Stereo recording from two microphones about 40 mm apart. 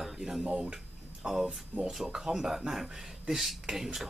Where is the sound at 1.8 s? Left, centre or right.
Centre.